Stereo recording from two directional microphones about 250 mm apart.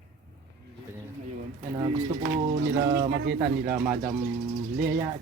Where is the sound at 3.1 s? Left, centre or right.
Right.